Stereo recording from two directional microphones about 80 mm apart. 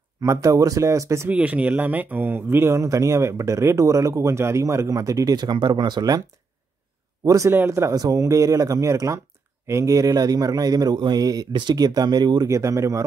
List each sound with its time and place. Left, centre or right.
0.2 s speech: right
1.3 s speech: centre; by 6.2 s right
7.2 s speech: right
7.9 s speech: right
12.4 s speech: right